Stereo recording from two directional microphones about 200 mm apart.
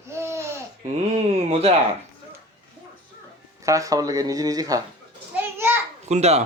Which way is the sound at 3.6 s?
15° right (ahead or behind).